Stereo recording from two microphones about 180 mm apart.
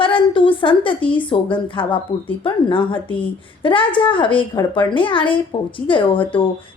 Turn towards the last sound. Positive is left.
turn(degrees=30)  # may be behind; listen again after turning